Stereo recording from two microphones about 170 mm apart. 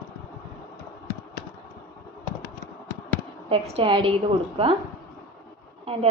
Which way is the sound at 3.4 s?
35° right (ahead or behind).